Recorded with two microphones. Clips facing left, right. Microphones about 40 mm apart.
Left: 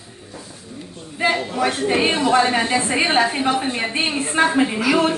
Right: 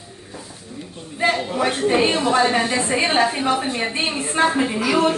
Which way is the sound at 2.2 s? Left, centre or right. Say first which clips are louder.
Left 1 dB; centre.